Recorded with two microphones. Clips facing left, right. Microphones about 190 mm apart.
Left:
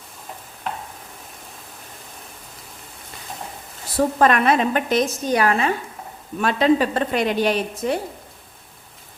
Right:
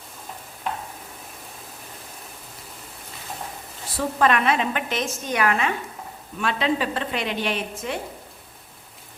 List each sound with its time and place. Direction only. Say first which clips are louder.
3.9 s a woman's voice: left 4 dB; 45° left (ahead or behind)